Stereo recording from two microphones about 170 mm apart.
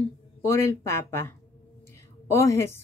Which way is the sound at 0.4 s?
15° left (ahead or behind).